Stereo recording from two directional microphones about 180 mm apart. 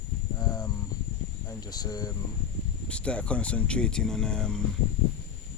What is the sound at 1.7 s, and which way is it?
Speech, 20° left (ahead or behind).